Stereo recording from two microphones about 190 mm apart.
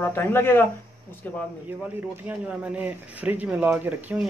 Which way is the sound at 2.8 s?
10° right (ahead or behind).